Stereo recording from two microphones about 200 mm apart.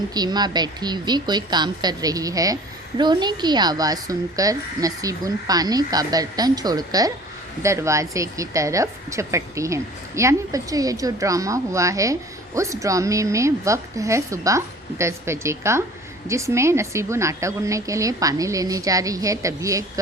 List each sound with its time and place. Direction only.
0.1 s a woman's voice: 20° right (ahead or behind)